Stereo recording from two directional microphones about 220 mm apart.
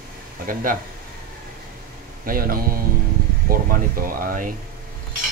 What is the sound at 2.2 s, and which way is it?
Speech, 40° right (ahead or behind).